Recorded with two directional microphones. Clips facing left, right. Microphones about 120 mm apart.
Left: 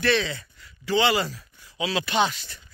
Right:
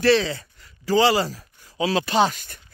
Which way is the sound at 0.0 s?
35° right (ahead or behind).